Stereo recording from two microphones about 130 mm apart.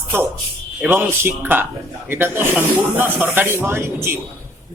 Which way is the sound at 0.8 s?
15° right (ahead or behind).